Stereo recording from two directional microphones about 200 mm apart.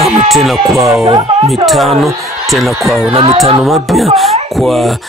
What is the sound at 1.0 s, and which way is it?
Speech, 30° right (ahead or behind).